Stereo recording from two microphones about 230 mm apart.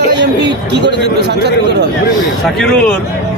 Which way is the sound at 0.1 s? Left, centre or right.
Right.